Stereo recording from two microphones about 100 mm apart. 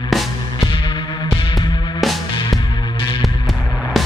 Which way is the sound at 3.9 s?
Centre (ahead or behind).